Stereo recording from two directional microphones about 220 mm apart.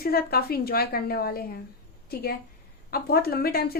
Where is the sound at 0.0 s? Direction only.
45° left (ahead or behind).